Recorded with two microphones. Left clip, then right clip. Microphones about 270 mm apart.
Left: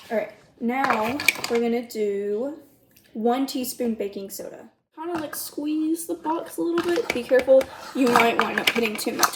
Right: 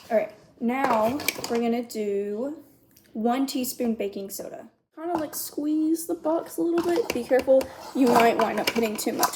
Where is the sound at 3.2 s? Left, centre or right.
Centre.